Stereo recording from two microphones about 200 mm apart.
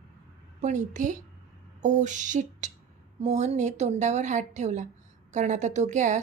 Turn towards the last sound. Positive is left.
turn(degrees=-35)  # may be behind; listen again after turning